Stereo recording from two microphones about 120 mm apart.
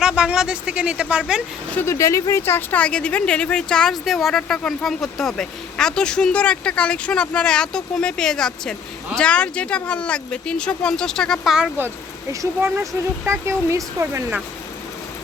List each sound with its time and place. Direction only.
0.0 s speech: 5° right (ahead or behind)
1.7 s speech: 20° left (ahead or behind); by 11.5 s 5° left (ahead or behind)
12.3 s speech: 25° right (ahead or behind)